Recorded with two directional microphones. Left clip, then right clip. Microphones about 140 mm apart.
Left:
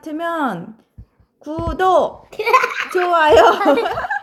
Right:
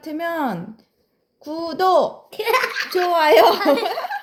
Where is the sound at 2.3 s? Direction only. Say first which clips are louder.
Left 5 dB; 30° left (ahead or behind).